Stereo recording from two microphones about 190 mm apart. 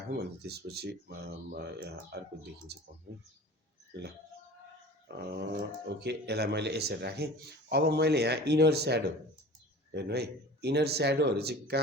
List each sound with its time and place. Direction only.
0.1 s speech: 55° right (ahead or behind)
5.0 s speech: 60° right (ahead or behind)